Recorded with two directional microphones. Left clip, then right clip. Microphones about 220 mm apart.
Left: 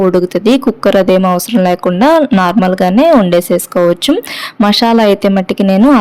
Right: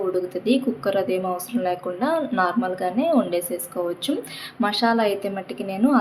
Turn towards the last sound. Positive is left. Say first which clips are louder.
# left 13 dB
turn(degrees=45)  # may be behind; listen again after turning